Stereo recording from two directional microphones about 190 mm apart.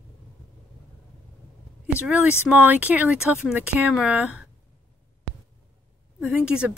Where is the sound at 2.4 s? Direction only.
10° right (ahead or behind).